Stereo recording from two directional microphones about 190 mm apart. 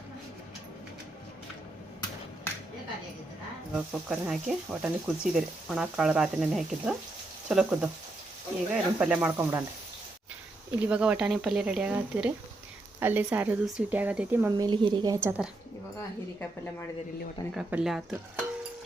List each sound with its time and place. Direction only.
3.8 s speech: 5° right (ahead or behind)
10.8 s speech: 5° right (ahead or behind)
14.5 s a woman's voice: 25° right (ahead or behind)
17.5 s speech: 5° right (ahead or behind)